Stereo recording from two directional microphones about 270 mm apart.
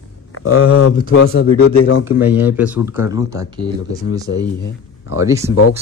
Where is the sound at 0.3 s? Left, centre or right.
Left.